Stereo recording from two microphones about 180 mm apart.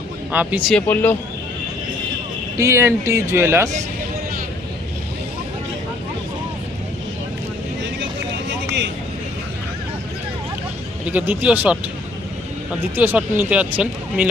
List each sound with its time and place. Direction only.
0.3 s speech: 10° right (ahead or behind)
0.7 s speech: 10° left (ahead or behind)
2.6 s speech: 15° right (ahead or behind)
8.4 s a sound: 80° right
11.0 s speech: 10° right (ahead or behind)
13.0 s speech: 10° right (ahead or behind)